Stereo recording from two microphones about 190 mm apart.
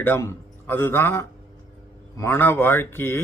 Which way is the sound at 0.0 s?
10° left (ahead or behind).